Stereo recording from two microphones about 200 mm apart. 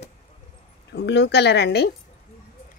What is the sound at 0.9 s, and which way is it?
Speech, 60° left (ahead or behind).